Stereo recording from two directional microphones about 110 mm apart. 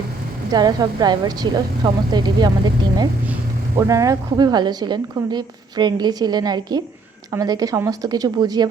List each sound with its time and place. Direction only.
0.5 s a woman's voice: 40° right (ahead or behind)
3.8 s a woman's voice: 30° right (ahead or behind)